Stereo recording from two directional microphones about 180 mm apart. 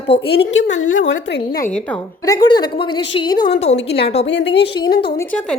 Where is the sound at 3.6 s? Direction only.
35° left (ahead or behind).